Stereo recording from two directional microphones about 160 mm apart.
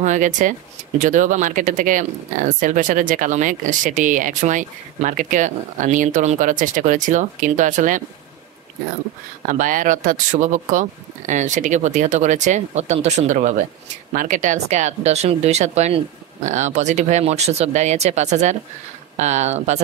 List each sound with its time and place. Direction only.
0.0 s speech: 50° right (ahead or behind)
9.5 s speech: 55° right (ahead or behind)